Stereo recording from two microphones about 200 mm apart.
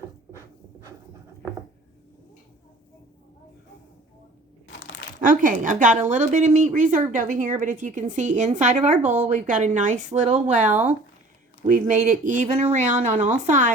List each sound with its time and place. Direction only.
5.2 s a woman's voice: 40° right (ahead or behind)